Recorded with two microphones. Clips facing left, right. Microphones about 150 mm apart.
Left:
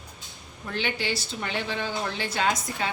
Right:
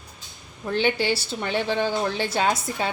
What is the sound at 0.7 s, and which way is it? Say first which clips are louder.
A woman's voice: right 7 dB; 30° right (ahead or behind).